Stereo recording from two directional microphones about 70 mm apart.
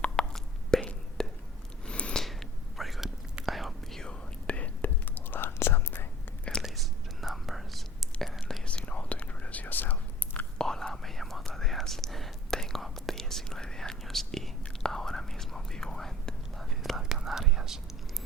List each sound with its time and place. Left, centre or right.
0.0 s whispering: centre
1.9 s a sound: centre
2.2 s a sound: centre
3.4 s whispering: centre
4.0 s whispering: centre; by 6.1 s left
6.6 s whispering: centre
8.6 s whispering: centre
10.6 s whispering: centre